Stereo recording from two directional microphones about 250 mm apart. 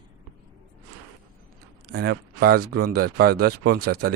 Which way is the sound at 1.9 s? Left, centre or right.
Right.